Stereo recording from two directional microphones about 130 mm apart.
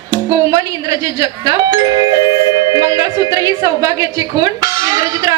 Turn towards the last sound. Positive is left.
turn(degrees=-30)  # may be behind; listen again after turning